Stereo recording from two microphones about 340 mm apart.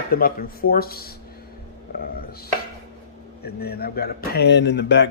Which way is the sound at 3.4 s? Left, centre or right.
Left.